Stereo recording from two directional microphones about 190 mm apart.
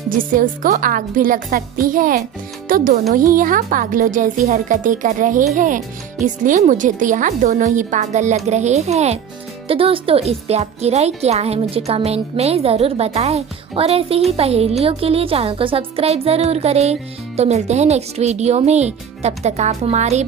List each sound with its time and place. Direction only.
0.2 s a woman's voice: 45° right (ahead or behind)